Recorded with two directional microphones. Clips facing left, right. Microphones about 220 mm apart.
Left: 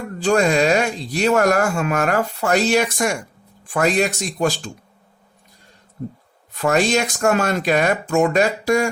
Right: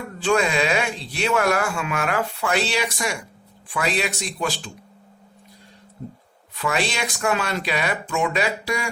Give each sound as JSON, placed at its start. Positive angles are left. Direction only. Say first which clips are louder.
{"t": 0.2, "sound": "speech", "louder": "left 4 dB", "side_deg": 40}
{"t": 6.5, "sound": "speech", "louder": "left 7 dB", "side_deg": 45}